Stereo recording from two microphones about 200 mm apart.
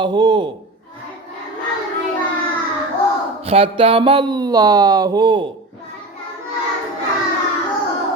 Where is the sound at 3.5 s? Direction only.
30° right (ahead or behind).